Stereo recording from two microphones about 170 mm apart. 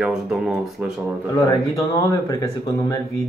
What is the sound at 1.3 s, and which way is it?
Speech, 20° left (ahead or behind).